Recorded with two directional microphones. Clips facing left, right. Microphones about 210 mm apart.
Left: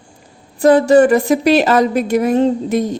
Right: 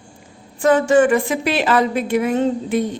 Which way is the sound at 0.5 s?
35° left (ahead or behind).